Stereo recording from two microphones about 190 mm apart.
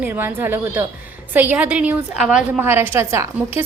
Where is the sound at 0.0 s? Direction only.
10° right (ahead or behind).